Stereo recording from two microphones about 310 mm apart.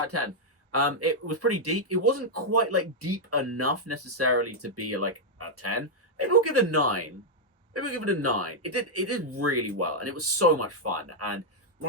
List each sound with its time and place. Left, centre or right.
0.0 s a man's voice: right